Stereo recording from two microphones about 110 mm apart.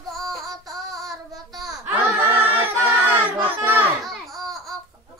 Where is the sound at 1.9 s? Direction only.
20° right (ahead or behind).